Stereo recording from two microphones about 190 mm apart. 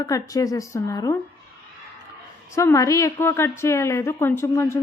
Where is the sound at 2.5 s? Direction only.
15° left (ahead or behind).